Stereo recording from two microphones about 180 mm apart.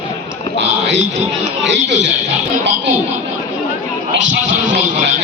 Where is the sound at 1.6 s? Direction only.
80° right.